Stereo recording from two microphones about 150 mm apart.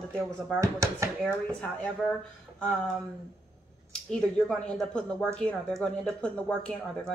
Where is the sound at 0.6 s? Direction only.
20° right (ahead or behind).